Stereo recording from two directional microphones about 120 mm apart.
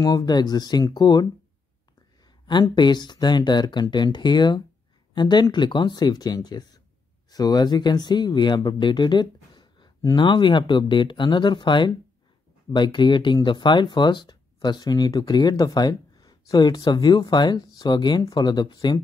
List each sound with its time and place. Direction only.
0.0 s speech: 35° left (ahead or behind)
2.2 s a sound: 40° left (ahead or behind)
2.7 s speech: 40° left (ahead or behind)